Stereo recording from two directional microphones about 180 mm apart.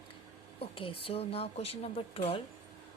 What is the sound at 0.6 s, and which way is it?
A woman's voice, 30° left (ahead or behind).